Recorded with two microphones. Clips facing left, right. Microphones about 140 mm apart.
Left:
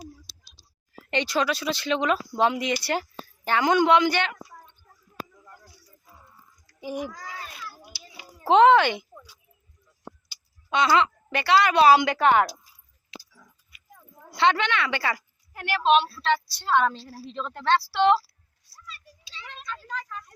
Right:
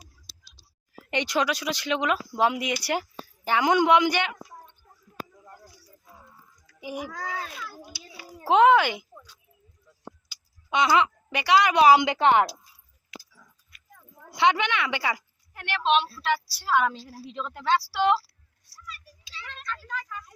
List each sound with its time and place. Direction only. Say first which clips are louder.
1.1 s speech: left 1 dB; 15° right (ahead or behind)
6.8 s speech: left 3 dB; 10° right (ahead or behind)
7.3 s children playing: right 5 dB; 90° right
8.4 s speech: left 2 dB; 5° right (ahead or behind)
10.7 s speech: left 1 dB; 15° right (ahead or behind)
13.7 s dog: left 2 dB; 5° left (ahead or behind)
14.3 s speech: even; 15° right (ahead or behind)
15.5 s a woman's voice: left 3 dB; 5° left (ahead or behind)
16.2 s speech: left 2 dB; 10° right (ahead or behind)
18.9 s a sound: right 2 dB; 25° left (ahead or behind)
19.5 s a sound: even; centre (ahead or behind)